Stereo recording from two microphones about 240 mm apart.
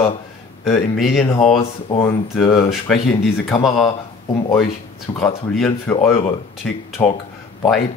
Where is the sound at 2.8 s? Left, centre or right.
Centre.